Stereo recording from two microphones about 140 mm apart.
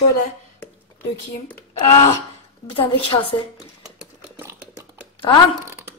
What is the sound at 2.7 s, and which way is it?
Speech, 40° left (ahead or behind).